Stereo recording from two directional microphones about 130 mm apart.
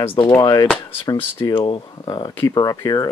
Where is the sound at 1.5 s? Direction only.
40° left (ahead or behind).